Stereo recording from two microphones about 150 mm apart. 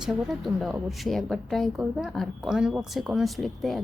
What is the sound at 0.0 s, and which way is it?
Speech, 5° right (ahead or behind).